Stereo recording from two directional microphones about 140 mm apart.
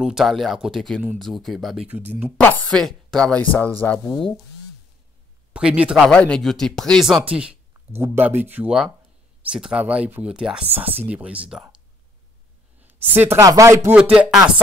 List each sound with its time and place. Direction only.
0.0 s speech: centre (ahead or behind)
1.9 s speech: 10° right (ahead or behind)
2.3 s speech: 10° left (ahead or behind)
5.5 s speech: 10° right (ahead or behind)
6.0 s speech: 5° left (ahead or behind)
7.3 s speech: 10° right (ahead or behind)
12.8 s speech: 15° right (ahead or behind)
13.4 s speech: 25° right (ahead or behind)
13.9 s speech: 10° right (ahead or behind)